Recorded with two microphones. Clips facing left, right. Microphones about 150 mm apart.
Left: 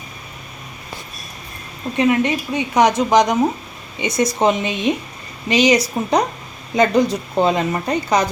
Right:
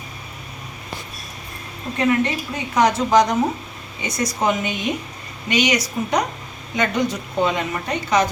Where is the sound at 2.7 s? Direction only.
20° left (ahead or behind).